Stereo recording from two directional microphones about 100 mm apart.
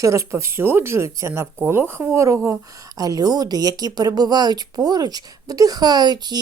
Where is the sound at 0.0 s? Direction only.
30° right (ahead or behind).